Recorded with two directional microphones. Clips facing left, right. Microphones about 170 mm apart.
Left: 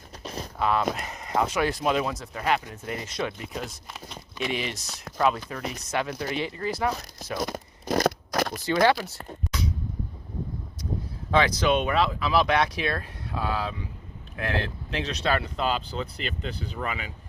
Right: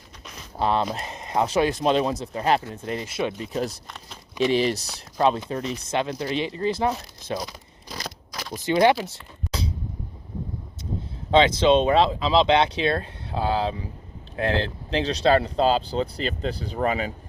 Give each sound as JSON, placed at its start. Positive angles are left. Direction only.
{"t": 0.2, "sound": "a sound", "side_deg": 35}
{"t": 0.5, "sound": "speech", "side_deg": -30}
{"t": 3.5, "sound": "speech", "side_deg": -40}
{"t": 3.9, "sound": "a sound", "side_deg": 0}
{"t": 4.4, "sound": "speech", "side_deg": -35}
{"t": 7.3, "sound": "tearing", "side_deg": 50}
{"t": 8.6, "sound": "speech", "side_deg": -20}
{"t": 9.5, "sound": "a sound", "side_deg": -30}
{"t": 11.3, "sound": "speech", "side_deg": -25}